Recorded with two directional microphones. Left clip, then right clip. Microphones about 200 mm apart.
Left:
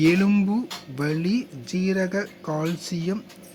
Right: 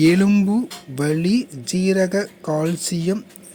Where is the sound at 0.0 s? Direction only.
20° right (ahead or behind).